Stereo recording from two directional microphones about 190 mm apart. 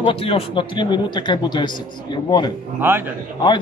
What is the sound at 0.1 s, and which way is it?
Speech, 30° left (ahead or behind).